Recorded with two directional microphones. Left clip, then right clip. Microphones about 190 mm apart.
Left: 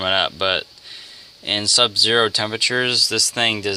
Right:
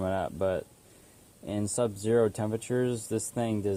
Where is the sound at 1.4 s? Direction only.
5° left (ahead or behind).